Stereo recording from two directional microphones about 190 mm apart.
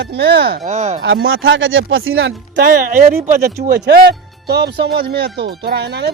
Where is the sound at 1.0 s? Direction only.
80° right; by 3.5 s 50° right (ahead or behind).